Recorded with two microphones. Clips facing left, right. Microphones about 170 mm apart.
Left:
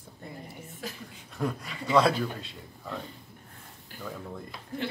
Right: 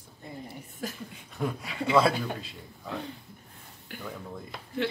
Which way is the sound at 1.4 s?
Centre (ahead or behind).